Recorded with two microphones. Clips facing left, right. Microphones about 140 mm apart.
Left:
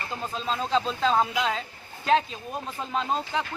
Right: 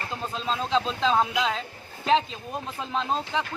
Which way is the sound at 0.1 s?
Centre (ahead or behind).